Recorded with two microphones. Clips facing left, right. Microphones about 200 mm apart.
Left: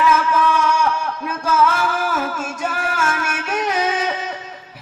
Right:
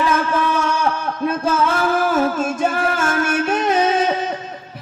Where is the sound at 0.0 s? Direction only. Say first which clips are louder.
Left 1 dB; 30° right (ahead or behind).